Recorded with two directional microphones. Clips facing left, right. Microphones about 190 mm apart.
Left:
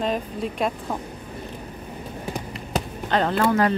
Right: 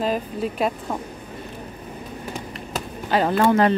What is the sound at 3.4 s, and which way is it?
Speech, 25° right (ahead or behind).